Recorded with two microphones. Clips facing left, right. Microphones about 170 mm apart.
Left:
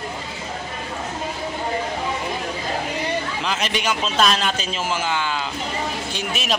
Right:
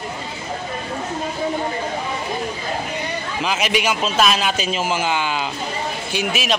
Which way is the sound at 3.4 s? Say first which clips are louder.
Right 5 dB; 10° right (ahead or behind).